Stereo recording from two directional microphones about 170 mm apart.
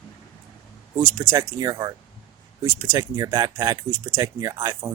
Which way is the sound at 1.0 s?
15° right (ahead or behind).